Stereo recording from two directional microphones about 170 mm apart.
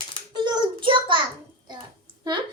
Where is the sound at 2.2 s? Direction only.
25° right (ahead or behind).